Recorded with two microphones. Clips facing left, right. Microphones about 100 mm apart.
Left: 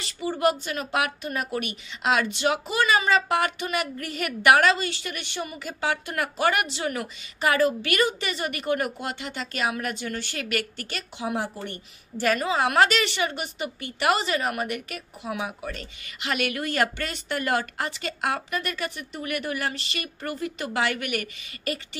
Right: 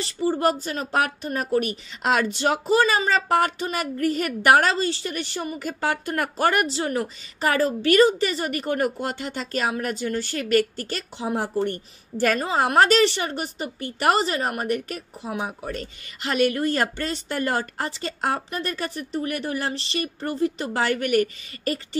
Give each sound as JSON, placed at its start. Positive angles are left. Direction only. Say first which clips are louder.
{"t": 0.0, "sound": "speech", "louder": "right 2 dB", "side_deg": -35}